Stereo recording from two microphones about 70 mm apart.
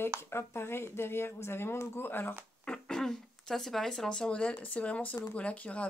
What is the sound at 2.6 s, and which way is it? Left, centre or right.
Speech, centre.